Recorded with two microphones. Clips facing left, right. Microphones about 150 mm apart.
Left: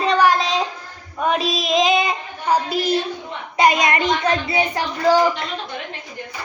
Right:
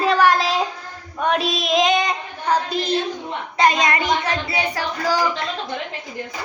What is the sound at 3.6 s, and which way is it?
A woman's voice, 10° left (ahead or behind).